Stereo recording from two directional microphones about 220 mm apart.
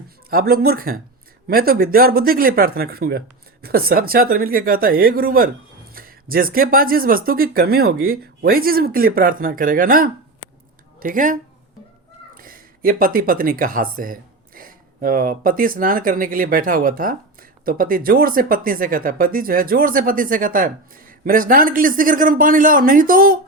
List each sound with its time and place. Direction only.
0.3 s speech: 40° right (ahead or behind)